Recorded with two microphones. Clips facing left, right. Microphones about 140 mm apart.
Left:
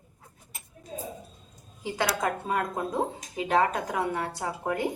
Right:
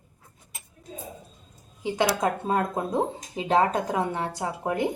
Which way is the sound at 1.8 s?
20° right (ahead or behind).